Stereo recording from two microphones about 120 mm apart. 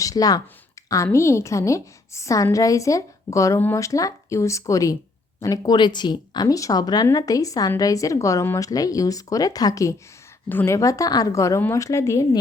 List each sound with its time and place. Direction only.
0.0 s a woman's voice: 30° left (ahead or behind)
10.5 s a woman's voice: 15° left (ahead or behind)
10.8 s a woman's voice: 30° left (ahead or behind)